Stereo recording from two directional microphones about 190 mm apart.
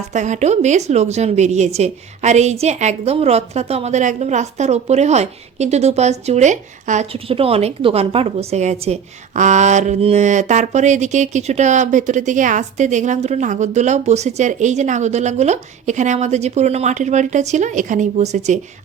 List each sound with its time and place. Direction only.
0.1 s a woman's voice: 40° right (ahead or behind)